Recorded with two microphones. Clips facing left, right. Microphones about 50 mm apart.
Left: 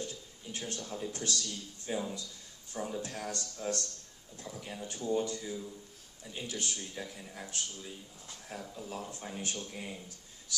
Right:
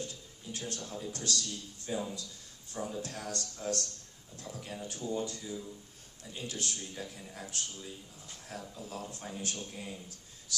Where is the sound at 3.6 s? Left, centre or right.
Centre.